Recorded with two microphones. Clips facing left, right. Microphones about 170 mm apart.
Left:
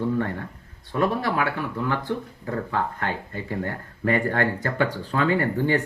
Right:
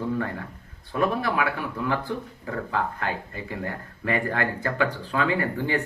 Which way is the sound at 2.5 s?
40° left (ahead or behind).